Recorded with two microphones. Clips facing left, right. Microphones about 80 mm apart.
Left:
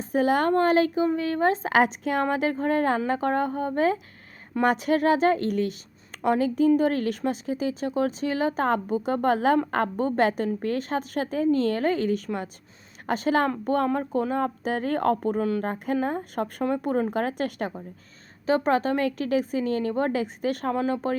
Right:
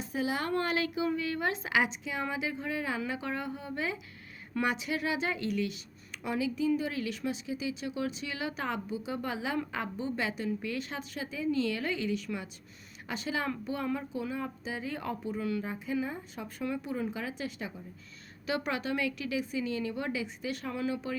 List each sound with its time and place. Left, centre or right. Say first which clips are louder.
0.0 s a woman's voice: left 11 dB; left
18.4 s speech: left 10 dB; left